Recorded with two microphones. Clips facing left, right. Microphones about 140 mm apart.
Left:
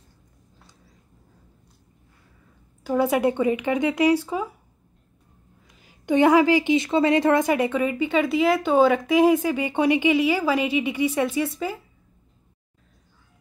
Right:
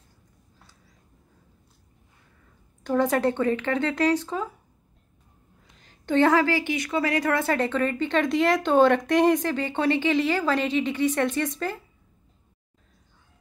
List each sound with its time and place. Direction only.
2.8 s a woman's voice: 10° left (ahead or behind)
5.8 s a woman's voice: 10° left (ahead or behind)